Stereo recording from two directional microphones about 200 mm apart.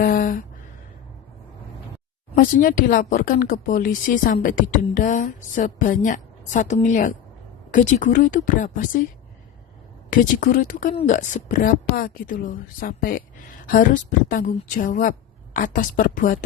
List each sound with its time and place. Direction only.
0.0 s a sound: 45° left (ahead or behind)
2.3 s a woman's voice: 45° left (ahead or behind)
10.1 s a woman's voice: 40° left (ahead or behind)